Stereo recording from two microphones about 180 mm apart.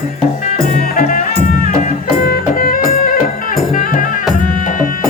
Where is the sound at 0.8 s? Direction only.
50° left (ahead or behind).